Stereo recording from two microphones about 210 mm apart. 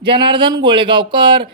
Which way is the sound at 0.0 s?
25° right (ahead or behind).